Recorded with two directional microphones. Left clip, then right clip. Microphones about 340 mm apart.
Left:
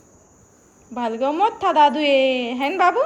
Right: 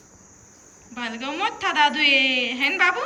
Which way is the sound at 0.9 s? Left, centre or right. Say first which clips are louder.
Left 8 dB; centre.